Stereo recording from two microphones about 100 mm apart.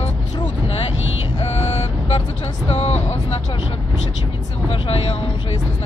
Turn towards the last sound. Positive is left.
turn(degrees=75)  # may be behind; listen again after turning